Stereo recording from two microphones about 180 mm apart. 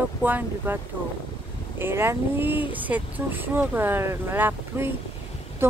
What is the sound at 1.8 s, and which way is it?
Speech, 15° right (ahead or behind).